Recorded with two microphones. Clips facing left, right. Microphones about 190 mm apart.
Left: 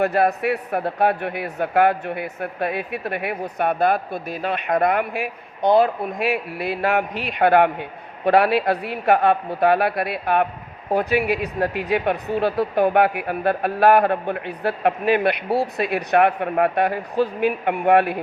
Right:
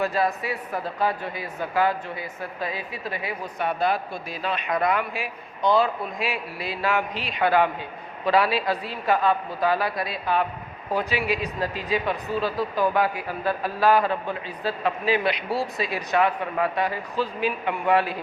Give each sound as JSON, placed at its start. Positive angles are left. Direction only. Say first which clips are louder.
{"t": 0.0, "sound": "a man's voice", "louder": "left 6 dB", "side_deg": 60}